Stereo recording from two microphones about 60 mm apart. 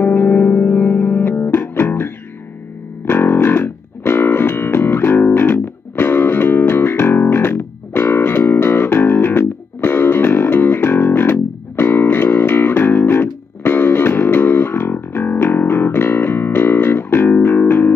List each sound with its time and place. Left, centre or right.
0.0 s music: left